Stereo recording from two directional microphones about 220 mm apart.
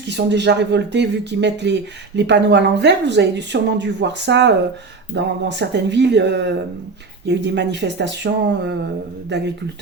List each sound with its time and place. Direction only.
0.1 s speech: 50° right (ahead or behind)